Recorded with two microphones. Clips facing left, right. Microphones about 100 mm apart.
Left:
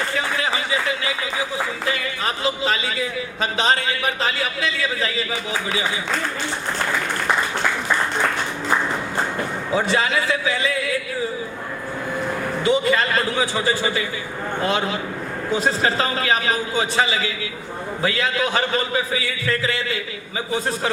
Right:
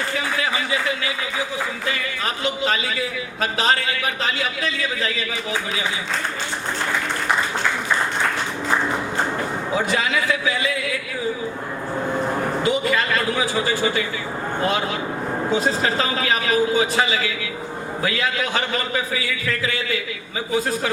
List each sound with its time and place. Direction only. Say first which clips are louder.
0.2 s a sound: even; 35° left (ahead or behind)
2.2 s a man's voice: left 1 dB; 30° left (ahead or behind)
9.7 s a man's voice: left 2 dB; 35° left (ahead or behind)
12.6 s a man's voice: left 4 dB; 30° left (ahead or behind)